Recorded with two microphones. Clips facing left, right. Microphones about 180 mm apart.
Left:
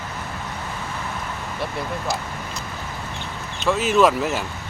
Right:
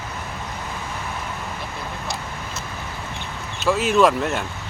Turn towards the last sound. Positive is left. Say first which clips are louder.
# even
turn(degrees=5)  # may be behind; listen again after turning